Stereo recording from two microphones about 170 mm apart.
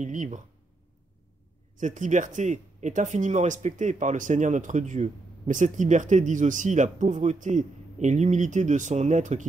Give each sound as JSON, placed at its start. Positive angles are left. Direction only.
{"t": 0.0, "sound": "speech", "side_deg": -45}
{"t": 1.8, "sound": "speech", "side_deg": -50}